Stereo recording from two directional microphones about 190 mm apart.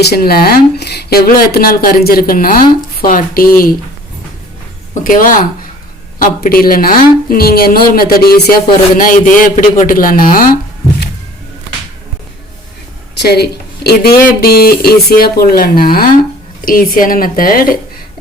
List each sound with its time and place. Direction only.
0.0 s speech: 55° left (ahead or behind)
5.0 s speech: 45° left (ahead or behind)
13.1 s speech: 60° left (ahead or behind)